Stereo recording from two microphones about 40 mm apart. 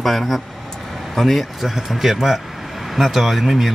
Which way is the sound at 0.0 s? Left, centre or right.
Centre.